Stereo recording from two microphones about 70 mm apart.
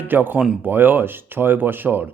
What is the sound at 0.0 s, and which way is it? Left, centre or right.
Speech, right.